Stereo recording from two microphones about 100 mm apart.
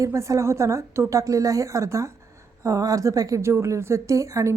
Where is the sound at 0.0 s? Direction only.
30° right (ahead or behind).